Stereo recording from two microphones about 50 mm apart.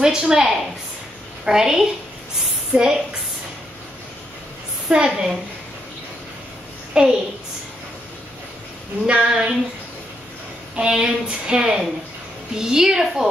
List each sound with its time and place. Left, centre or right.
0.0 s speech: centre
4.8 s a woman's voice: centre
6.9 s a woman's voice: centre
9.0 s speech: centre
10.8 s speech: centre